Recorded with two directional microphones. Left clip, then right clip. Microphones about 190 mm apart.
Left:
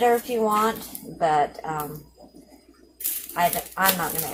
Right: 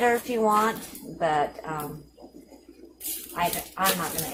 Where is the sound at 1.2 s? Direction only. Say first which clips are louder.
Left 3 dB; 10° right (ahead or behind).